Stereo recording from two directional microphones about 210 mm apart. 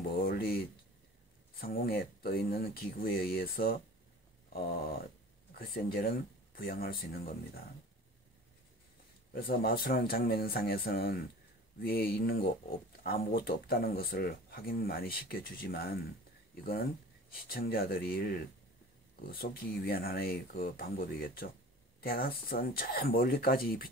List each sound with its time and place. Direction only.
0.2 s a sound: 45° left (ahead or behind)
1.5 s speech: 45° left (ahead or behind)
9.3 s speech: 45° left (ahead or behind)